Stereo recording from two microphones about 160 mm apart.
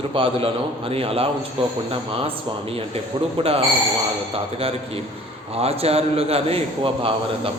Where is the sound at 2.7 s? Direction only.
40° right (ahead or behind).